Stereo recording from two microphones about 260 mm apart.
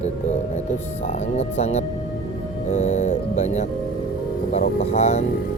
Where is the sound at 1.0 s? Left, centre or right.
Left.